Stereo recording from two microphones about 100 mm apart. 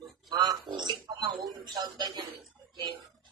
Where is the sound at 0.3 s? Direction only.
40° right (ahead or behind).